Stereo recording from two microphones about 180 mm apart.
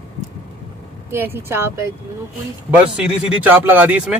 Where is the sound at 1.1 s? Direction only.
10° right (ahead or behind).